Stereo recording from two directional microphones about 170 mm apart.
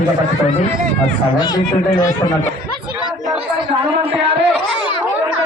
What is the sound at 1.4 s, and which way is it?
Speech, 25° left (ahead or behind).